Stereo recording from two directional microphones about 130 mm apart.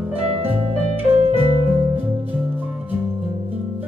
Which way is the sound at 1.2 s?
50° right (ahead or behind).